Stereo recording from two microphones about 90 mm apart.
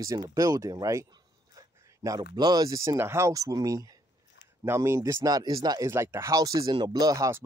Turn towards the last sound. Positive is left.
turn(degrees=-40)  # may be behind; listen again after turning